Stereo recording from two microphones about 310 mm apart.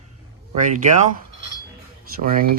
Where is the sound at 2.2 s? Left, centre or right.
Right.